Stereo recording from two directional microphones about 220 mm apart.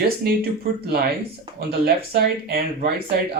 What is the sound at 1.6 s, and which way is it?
Speech, 45° right (ahead or behind).